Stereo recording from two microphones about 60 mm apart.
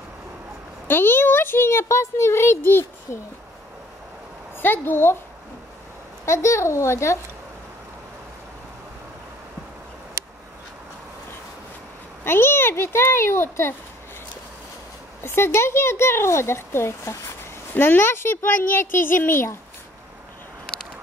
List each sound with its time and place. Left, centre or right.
0.8 s a child's voice: left
4.6 s a child's voice: left
6.2 s speech: left
12.3 s speech: left
15.2 s a child's voice: left